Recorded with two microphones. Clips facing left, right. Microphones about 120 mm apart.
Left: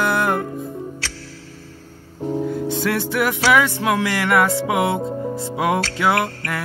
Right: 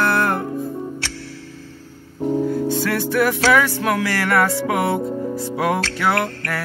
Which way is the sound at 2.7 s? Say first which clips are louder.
Right 1 dB; 20° left (ahead or behind).